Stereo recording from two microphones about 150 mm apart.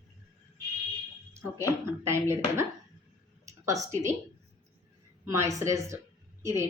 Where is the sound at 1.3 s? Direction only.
15° right (ahead or behind).